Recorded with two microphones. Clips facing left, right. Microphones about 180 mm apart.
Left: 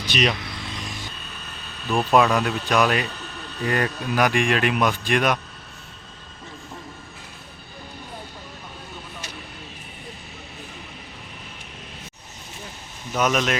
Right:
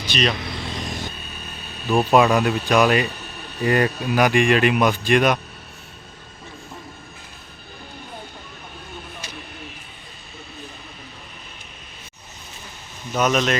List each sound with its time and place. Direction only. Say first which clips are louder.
0.1 s speech: even; 15° left (ahead or behind)
0.3 s vehicle: right 5 dB; 30° right (ahead or behind)
1.9 s speech: right 3 dB; 5° right (ahead or behind)
13.1 s speech: right 2 dB; 5° left (ahead or behind)